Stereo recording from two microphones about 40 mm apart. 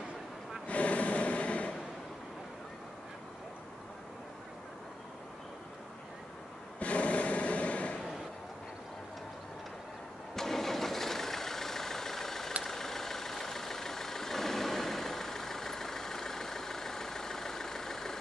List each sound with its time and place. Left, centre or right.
0.7 s snort: left
6.8 s a sound: left
10.3 s vehicle: centre